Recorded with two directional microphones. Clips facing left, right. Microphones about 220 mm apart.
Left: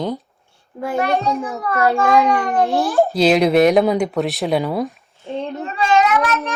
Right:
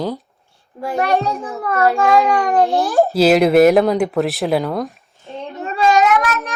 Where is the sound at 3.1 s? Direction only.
5° right (ahead or behind).